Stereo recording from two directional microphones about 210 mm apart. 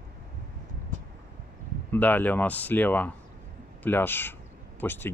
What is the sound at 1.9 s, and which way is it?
Speech, 10° left (ahead or behind).